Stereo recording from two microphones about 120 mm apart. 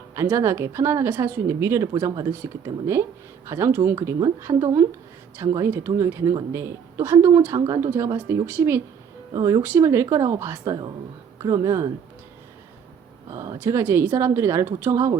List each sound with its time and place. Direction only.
0.2 s a woman's voice: 20° right (ahead or behind)
1.9 s speech: 35° right (ahead or behind)
2.4 s a woman's voice: 25° right (ahead or behind)
9.3 s a woman's voice: 30° right (ahead or behind)
10.6 s a woman's voice: 35° right (ahead or behind)
13.3 s a woman's voice: 25° right (ahead or behind)